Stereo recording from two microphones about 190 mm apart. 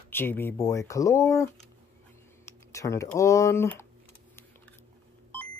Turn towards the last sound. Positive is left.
turn(degrees=15)  # may be behind; listen again after turning